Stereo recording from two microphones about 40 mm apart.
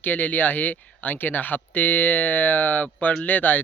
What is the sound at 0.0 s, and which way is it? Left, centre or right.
Speech, left.